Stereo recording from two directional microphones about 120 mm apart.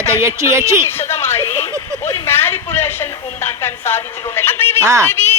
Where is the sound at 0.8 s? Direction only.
20° left (ahead or behind).